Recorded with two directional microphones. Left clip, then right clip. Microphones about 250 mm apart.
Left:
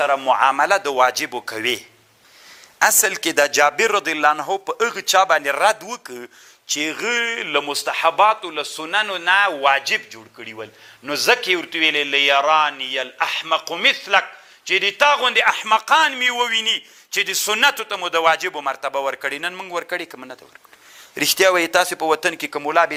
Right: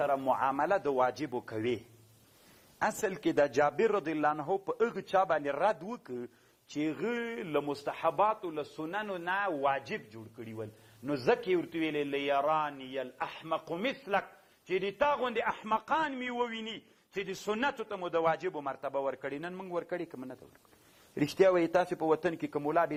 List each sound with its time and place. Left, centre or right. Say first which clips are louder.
0.0 s a man's voice: left 13 dB; centre